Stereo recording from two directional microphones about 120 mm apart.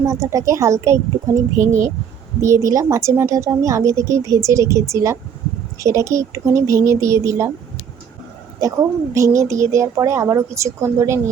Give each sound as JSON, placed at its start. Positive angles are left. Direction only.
{"t": 0.1, "sound": "speech", "side_deg": -25}
{"t": 1.5, "sound": "speech", "side_deg": -90}
{"t": 2.4, "sound": "speech", "side_deg": -25}
{"t": 9.1, "sound": "speech", "side_deg": -25}